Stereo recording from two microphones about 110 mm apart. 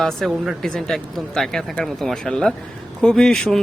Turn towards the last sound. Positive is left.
turn(degrees=5)  # may be behind; listen again after turning